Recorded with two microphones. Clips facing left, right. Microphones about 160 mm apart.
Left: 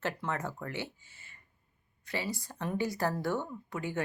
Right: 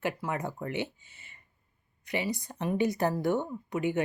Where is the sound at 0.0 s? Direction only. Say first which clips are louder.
Right 3 dB; 15° right (ahead or behind).